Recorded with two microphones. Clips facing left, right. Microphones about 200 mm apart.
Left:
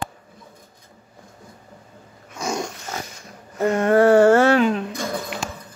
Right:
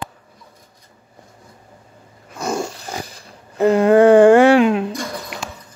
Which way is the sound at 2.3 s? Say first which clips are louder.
Right 3 dB; 5° right (ahead or behind).